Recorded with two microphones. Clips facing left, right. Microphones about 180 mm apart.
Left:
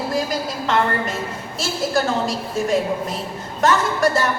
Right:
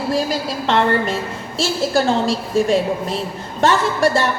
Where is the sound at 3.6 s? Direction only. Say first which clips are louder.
Right 2 dB; 30° right (ahead or behind).